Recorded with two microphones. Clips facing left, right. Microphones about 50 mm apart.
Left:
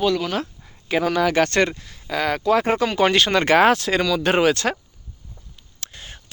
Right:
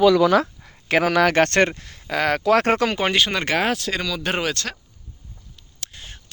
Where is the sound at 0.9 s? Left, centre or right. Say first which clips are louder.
Right 2 dB; right.